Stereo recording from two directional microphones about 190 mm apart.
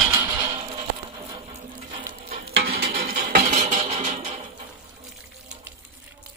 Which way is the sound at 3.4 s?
35° right (ahead or behind).